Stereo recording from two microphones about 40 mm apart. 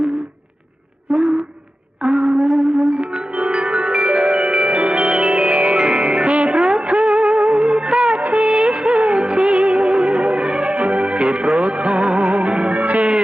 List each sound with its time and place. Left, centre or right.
1.1 s a sound: centre
2.2 s a sound: right
3.0 s music: right
6.6 s music: centre
7.1 s music: right
8.2 s music of bollywood: right
11.5 s music: right